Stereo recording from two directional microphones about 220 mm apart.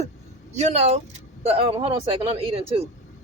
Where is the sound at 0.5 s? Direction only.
30° right (ahead or behind).